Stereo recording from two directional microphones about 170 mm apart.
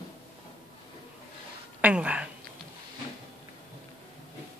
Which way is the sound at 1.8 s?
5° right (ahead or behind).